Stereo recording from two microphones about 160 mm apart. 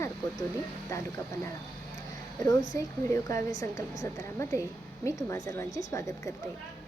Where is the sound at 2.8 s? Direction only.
20° left (ahead or behind).